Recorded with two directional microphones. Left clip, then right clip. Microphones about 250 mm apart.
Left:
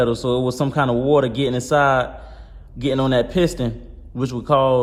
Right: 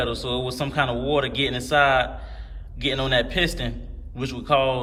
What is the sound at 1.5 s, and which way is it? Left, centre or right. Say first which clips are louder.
A man's voice: right 1 dB; left.